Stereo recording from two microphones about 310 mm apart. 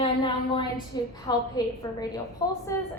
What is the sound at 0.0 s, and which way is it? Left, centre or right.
A woman's voice, centre.